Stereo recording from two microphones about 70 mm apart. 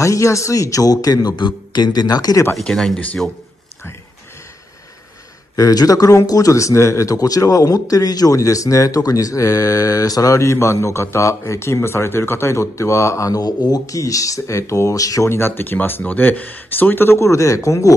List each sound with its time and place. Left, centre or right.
0.0 s speech: left
2.6 s speech: centre
5.6 s speech: left
15.2 s speech: left